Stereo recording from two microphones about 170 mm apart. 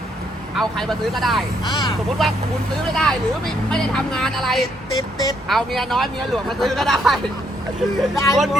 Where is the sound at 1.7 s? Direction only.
25° left (ahead or behind).